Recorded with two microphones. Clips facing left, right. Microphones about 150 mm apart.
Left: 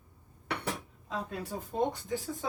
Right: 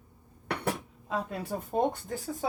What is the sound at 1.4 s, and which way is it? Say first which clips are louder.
Speech: right 4 dB; 60° right (ahead or behind).